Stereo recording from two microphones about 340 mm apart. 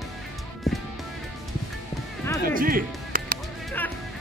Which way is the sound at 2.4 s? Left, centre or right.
Right.